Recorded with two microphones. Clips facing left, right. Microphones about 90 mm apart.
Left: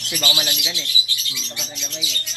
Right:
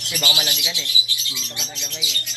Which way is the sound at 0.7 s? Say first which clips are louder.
Even; 20° right (ahead or behind).